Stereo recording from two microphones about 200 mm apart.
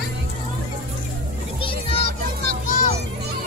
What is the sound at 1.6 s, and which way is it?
Music, 25° left (ahead or behind).